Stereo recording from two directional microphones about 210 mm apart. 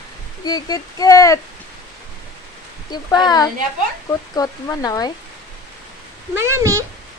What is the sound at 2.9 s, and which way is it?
A child's voice, 20° left (ahead or behind).